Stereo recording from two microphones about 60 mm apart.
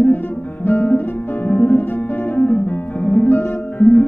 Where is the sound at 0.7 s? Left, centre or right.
Left.